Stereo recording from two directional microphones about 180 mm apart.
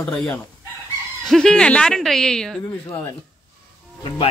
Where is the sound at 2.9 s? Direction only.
20° left (ahead or behind).